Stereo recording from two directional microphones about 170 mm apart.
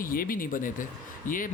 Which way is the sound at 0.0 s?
55° left (ahead or behind).